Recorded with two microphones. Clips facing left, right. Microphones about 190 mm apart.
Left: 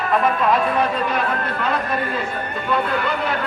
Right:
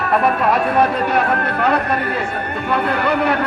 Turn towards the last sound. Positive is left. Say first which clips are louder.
# right 5 dB
turn(degrees=-65)  # may be behind; listen again after turning